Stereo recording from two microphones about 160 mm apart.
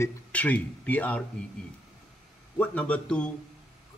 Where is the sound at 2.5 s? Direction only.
10° left (ahead or behind).